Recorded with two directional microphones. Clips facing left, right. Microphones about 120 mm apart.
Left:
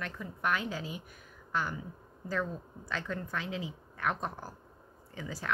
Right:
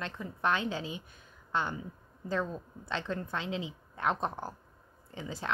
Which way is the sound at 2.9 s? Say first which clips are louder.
Right 2 dB; 25° right (ahead or behind).